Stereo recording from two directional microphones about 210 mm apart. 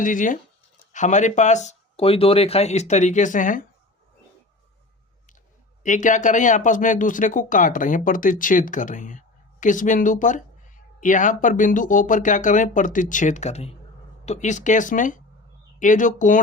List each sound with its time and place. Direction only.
0.0 s speech: 40° left (ahead or behind)
5.8 s speech: 35° left (ahead or behind)